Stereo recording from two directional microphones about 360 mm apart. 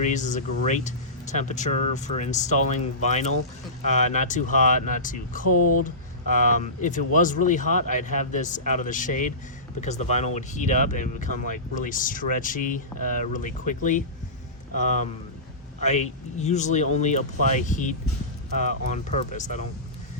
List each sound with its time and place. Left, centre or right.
0.0 s speech: centre
5.5 s speech: left
6.3 s speech: left